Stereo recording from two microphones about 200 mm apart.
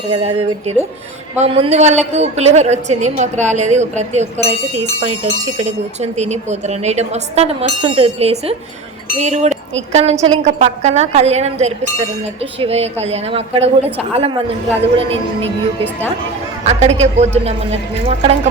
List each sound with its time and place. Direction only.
0.1 s a woman's voice: 30° right (ahead or behind)
16.6 s a woman's voice: 35° right (ahead or behind)